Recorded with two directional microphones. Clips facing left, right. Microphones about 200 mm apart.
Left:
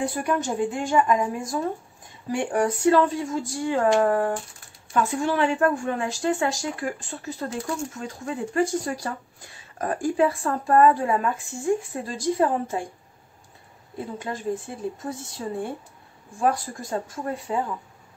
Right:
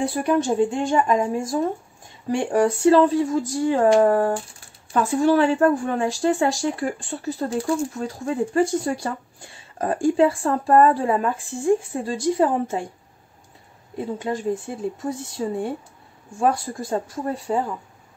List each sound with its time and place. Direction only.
0.0 s a woman's voice: 30° right (ahead or behind)
13.9 s a woman's voice: 25° right (ahead or behind)